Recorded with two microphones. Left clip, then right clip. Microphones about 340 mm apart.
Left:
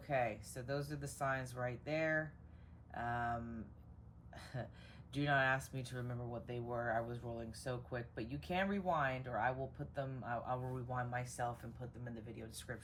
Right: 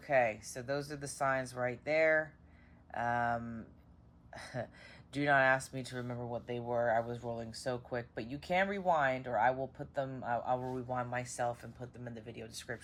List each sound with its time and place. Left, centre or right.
0.0 s speech: right